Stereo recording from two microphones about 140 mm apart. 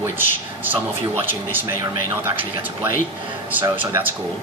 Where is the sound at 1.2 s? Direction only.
15° right (ahead or behind).